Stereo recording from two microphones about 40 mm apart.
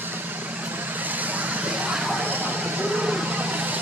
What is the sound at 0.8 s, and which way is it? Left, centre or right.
Vehicle, right.